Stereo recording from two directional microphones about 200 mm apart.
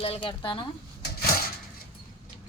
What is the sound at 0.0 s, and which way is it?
Speech, 25° left (ahead or behind).